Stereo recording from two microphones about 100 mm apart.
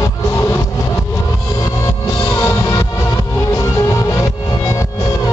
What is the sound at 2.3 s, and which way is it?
Music, 30° left (ahead or behind).